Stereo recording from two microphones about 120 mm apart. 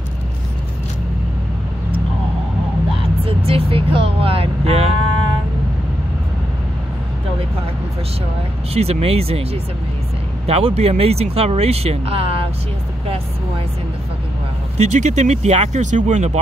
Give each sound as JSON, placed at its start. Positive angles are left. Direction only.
{"t": 3.3, "sound": "vehicle", "side_deg": -55}
{"t": 8.7, "sound": "speech", "side_deg": -60}
{"t": 14.8, "sound": "speech", "side_deg": -75}